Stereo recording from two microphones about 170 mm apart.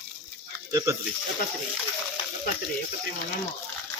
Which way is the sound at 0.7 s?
20° right (ahead or behind).